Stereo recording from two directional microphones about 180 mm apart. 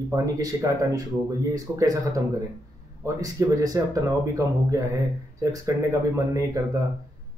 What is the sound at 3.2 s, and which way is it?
Speech, 20° right (ahead or behind).